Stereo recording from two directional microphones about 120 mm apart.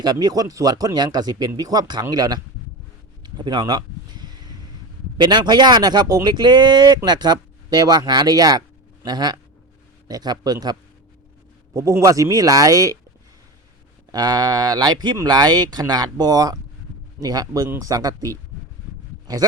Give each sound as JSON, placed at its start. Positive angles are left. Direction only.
{"t": 0.0, "sound": "speech", "side_deg": -35}
{"t": 3.2, "sound": "a sound", "side_deg": -35}
{"t": 5.1, "sound": "speech", "side_deg": -35}
{"t": 14.1, "sound": "speech", "side_deg": -35}